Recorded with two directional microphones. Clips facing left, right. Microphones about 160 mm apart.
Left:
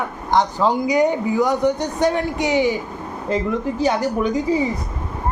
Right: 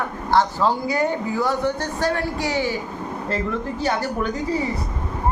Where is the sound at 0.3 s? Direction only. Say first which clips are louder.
Left 1 dB; 15° left (ahead or behind).